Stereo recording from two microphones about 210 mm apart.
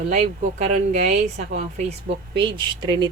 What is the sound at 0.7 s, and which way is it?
A woman's voice, 35° right (ahead or behind).